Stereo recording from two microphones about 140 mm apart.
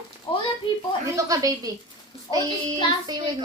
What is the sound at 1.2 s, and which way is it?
Speech, 25° right (ahead or behind).